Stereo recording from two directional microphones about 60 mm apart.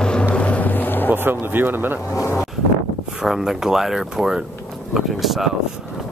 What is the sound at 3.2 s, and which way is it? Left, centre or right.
Speech, centre.